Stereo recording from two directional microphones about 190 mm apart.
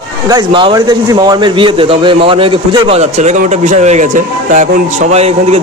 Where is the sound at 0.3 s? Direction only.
25° right (ahead or behind).